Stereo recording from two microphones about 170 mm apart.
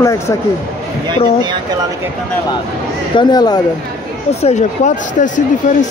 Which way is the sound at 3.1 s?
25° left (ahead or behind).